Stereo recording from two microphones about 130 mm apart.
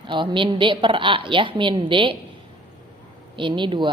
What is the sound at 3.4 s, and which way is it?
Speech, 40° right (ahead or behind).